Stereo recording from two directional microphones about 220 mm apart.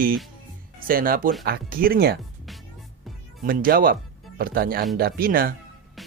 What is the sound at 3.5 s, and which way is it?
Speech, 40° right (ahead or behind).